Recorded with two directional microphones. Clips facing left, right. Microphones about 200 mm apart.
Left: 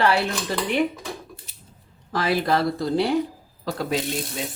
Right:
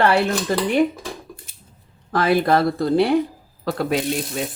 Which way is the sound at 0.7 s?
45° right (ahead or behind).